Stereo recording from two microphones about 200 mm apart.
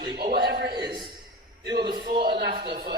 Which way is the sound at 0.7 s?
20° right (ahead or behind).